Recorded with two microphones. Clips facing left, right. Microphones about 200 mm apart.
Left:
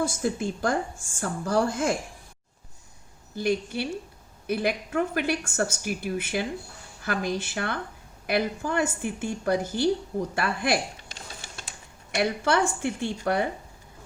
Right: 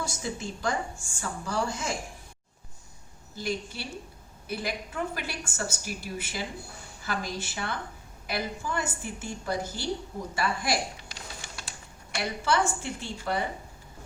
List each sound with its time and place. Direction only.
0.0 s a woman's voice: 55° left (ahead or behind)
3.3 s a woman's voice: 55° left (ahead or behind)
12.1 s a woman's voice: 60° left (ahead or behind)